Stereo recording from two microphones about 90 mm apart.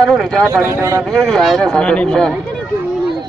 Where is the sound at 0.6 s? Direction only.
30° right (ahead or behind).